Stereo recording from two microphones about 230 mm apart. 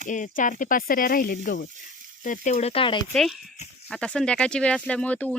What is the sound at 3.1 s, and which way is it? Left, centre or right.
A woman's voice, centre.